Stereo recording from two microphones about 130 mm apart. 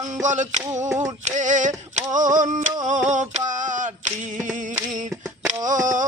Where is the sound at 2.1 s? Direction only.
80° right.